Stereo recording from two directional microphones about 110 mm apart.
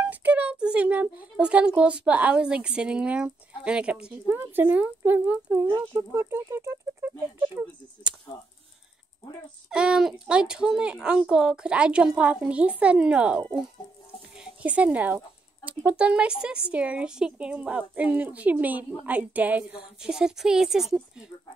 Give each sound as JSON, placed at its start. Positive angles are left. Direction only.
{"t": 0.1, "sound": "a woman's voice", "side_deg": -15}
{"t": 9.7, "sound": "a woman's voice", "side_deg": -5}